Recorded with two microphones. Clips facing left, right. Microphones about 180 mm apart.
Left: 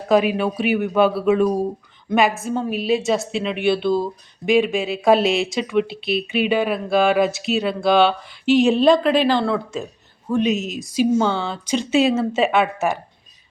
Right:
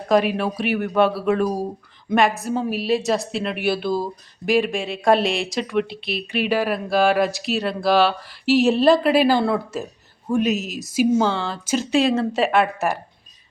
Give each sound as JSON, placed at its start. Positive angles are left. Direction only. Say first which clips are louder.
{"t": 0.1, "sound": "a woman's voice", "louder": "left 2 dB", "side_deg": 0}